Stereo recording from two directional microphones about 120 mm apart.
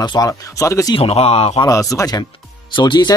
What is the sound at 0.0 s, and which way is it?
Speech, 40° left (ahead or behind).